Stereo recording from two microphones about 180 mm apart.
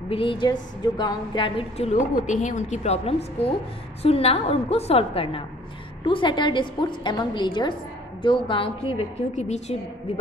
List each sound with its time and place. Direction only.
0.1 s a woman's voice: 30° left (ahead or behind)